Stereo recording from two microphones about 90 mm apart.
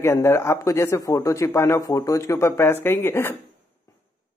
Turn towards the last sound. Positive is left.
turn(degrees=25)  # may be behind; listen again after turning